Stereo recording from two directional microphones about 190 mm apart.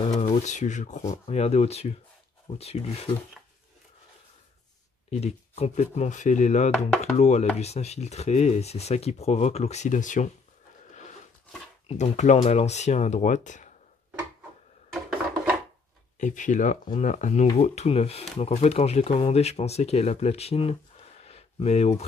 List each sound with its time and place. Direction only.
0.2 s speech: 40° left (ahead or behind)
5.1 s speech: 35° left (ahead or behind)
11.9 s speech: 35° left (ahead or behind)
14.9 s a sound: 5° right (ahead or behind)
16.2 s speech: 40° left (ahead or behind)